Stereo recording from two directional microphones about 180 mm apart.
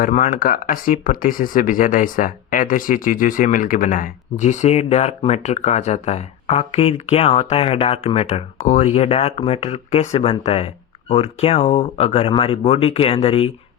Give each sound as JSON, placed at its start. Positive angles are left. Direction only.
{"t": 0.0, "sound": "speech", "side_deg": 50}